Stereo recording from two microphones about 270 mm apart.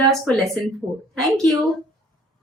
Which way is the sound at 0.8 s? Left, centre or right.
Centre.